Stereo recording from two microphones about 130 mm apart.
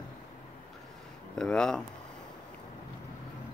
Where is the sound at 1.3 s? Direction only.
5° left (ahead or behind).